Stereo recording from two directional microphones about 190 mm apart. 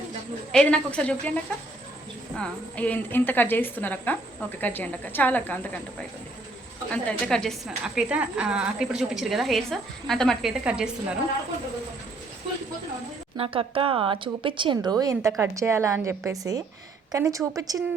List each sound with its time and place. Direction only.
0.5 s a woman's voice: 5° left (ahead or behind)
2.4 s a woman's voice: 5° left (ahead or behind)
13.3 s a woman's voice: 30° right (ahead or behind)